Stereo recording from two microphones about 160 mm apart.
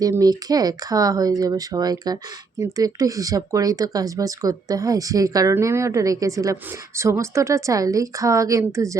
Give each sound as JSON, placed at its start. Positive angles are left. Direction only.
{"t": 0.0, "sound": "speech", "side_deg": -20}